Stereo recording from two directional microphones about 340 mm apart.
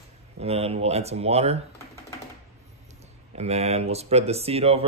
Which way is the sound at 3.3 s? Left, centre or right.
Centre.